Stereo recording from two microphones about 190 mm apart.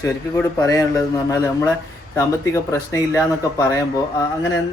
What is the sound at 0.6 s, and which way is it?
Speech, 20° left (ahead or behind).